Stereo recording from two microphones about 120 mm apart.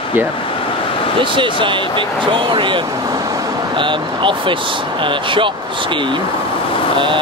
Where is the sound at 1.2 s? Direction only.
45° right (ahead or behind).